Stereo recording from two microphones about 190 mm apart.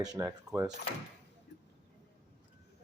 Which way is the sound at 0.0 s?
15° right (ahead or behind).